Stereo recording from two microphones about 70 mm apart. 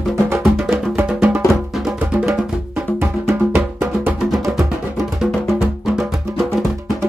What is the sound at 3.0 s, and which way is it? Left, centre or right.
Music, right.